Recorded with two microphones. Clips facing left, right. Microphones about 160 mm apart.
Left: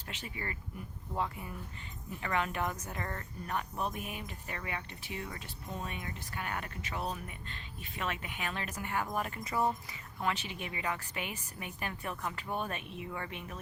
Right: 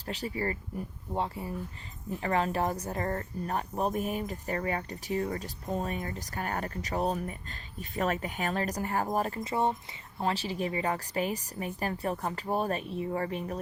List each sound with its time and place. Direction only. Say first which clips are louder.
0.1 s speech: right 10 dB; 35° right (ahead or behind)